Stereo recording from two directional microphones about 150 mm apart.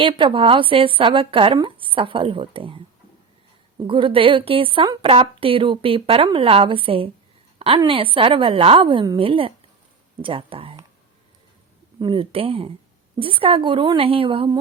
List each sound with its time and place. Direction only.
0.2 s a woman's voice: 35° right (ahead or behind)
3.8 s a woman's voice: 35° right (ahead or behind)
11.9 s a woman's voice: 35° right (ahead or behind)